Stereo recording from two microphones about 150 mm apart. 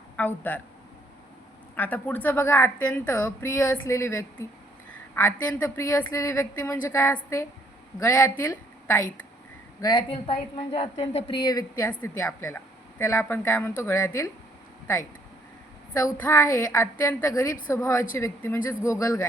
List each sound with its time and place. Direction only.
0.2 s a woman's voice: 10° left (ahead or behind)
1.7 s a woman's voice: 10° left (ahead or behind)
9.8 s a woman's voice: 30° left (ahead or behind)
10.2 s a woman's voice: 40° left (ahead or behind); by 14.3 s 20° left (ahead or behind)
16.1 s a woman's voice: 15° left (ahead or behind)